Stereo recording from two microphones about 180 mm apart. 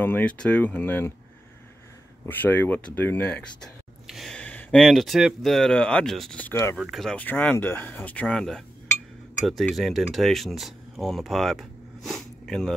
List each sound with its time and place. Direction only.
0.0 s speech: 10° left (ahead or behind)
2.2 s speech: 10° left (ahead or behind)
6.8 s speech: centre (ahead or behind)